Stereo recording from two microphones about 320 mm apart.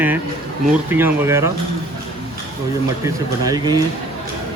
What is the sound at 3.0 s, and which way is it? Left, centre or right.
Speech, centre.